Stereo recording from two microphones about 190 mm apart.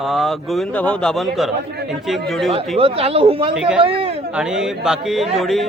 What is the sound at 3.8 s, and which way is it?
Speech, 30° right (ahead or behind).